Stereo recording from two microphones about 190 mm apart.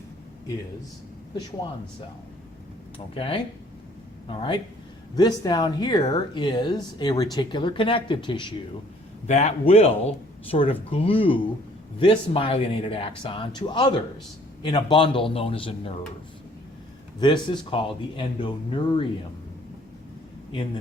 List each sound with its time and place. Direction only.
3.2 s speech: 30° left (ahead or behind)
9.2 s a man's voice: 35° left (ahead or behind)
17.2 s speech: 25° left (ahead or behind)